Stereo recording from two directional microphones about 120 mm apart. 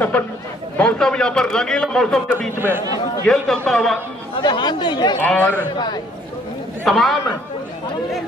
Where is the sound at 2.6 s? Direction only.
20° right (ahead or behind).